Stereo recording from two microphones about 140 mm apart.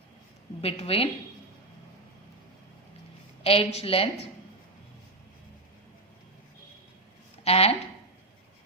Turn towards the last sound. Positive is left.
turn(degrees=45)  # may be behind; listen again after turning